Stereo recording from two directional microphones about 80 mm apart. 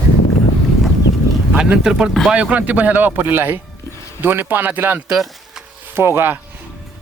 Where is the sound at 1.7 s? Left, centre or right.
Centre.